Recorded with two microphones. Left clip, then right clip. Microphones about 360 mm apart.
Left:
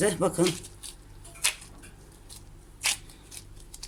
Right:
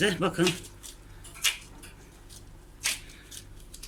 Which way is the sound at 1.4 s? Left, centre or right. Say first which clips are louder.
Right 2 dB; centre.